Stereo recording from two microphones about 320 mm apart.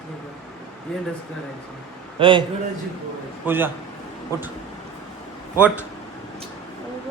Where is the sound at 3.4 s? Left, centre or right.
Centre.